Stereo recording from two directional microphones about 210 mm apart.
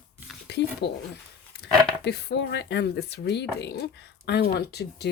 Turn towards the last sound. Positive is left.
turn(degrees=50)  # may be behind; listen again after turning